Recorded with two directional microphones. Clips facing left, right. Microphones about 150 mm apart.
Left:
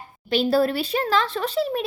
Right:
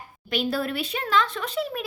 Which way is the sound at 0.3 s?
35° left (ahead or behind).